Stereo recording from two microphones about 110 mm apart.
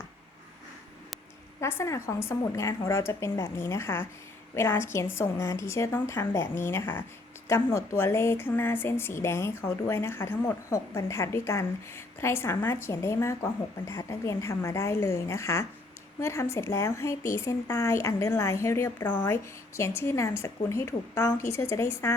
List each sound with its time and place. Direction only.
1.6 s speech: 25° left (ahead or behind)